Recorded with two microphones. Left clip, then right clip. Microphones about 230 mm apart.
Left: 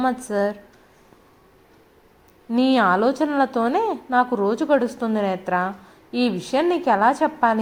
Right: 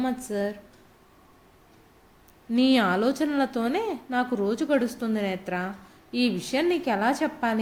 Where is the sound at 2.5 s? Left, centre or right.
Centre.